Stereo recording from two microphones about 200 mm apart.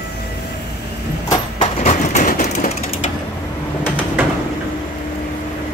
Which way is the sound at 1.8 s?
35° left (ahead or behind).